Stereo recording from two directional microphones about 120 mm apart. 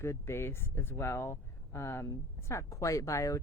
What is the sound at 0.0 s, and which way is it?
Speech, 20° left (ahead or behind).